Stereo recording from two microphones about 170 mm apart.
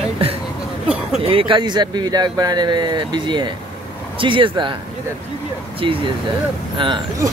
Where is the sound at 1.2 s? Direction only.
30° right (ahead or behind).